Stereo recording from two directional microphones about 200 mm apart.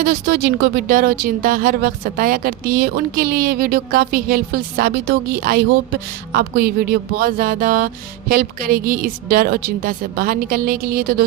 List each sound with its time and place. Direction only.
0.0 s speech: 50° right (ahead or behind)